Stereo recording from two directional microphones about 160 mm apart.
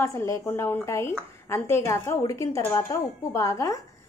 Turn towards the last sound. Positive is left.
turn(degrees=20)  # may be behind; listen again after turning